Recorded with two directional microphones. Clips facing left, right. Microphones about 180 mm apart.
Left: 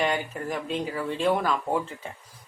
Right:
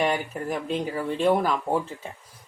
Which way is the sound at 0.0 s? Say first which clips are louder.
Right 2 dB; 5° right (ahead or behind).